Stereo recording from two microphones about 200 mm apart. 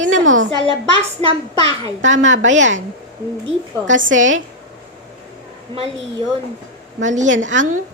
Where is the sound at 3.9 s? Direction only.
70° right (ahead or behind).